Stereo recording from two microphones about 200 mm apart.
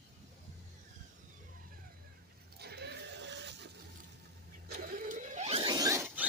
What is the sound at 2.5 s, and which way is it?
Goat, 55° right (ahead or behind).